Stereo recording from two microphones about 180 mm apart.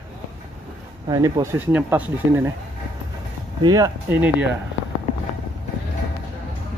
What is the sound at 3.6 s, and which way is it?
Speech, 20° right (ahead or behind).